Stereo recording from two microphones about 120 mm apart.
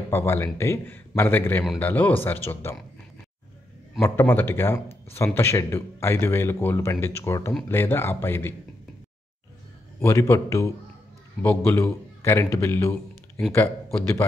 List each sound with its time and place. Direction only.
0.1 s speech: 20° left (ahead or behind)
4.0 s speech: 15° left (ahead or behind)
9.9 s speech: 20° left (ahead or behind)